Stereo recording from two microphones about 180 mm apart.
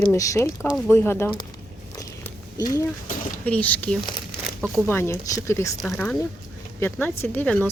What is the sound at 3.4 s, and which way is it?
A woman's voice, 10° left (ahead or behind).